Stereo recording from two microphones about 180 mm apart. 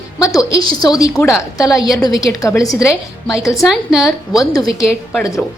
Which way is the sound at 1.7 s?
Centre (ahead or behind).